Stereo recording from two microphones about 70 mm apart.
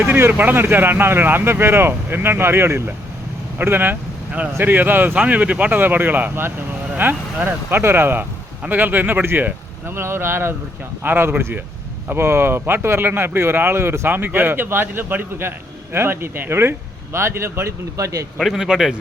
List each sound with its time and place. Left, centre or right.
0.3 s a man's voice: right
18.3 s speech: centre